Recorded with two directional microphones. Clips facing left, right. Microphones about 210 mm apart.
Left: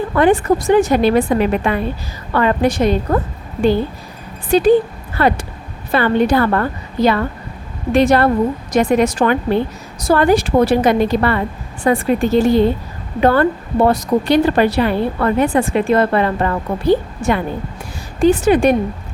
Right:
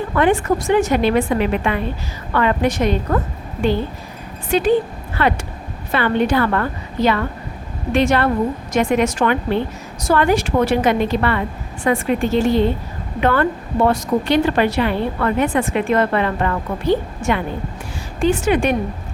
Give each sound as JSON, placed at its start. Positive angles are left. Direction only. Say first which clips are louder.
{"t": 0.2, "sound": "a woman's voice", "louder": "left 3 dB", "side_deg": 35}
{"t": 4.5, "sound": "a woman's voice", "louder": "left 4 dB", "side_deg": 35}